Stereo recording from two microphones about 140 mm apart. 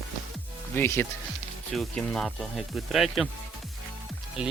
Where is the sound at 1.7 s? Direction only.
5° left (ahead or behind).